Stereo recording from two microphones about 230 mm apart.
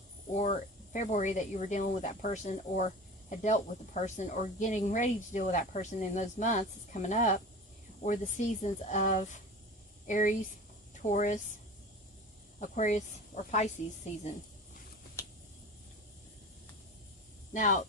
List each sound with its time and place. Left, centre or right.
0.9 s speech: left
12.5 s speech: left
15.2 s vehicle: centre
17.5 s speech: left